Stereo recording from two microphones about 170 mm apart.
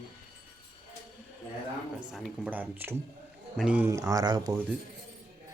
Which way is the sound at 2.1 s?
5° right (ahead or behind).